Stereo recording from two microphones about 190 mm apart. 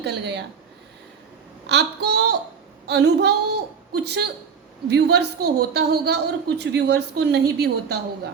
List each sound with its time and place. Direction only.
0.0 s a woman's voice: 60° right (ahead or behind)
1.6 s a woman's voice: 60° right (ahead or behind)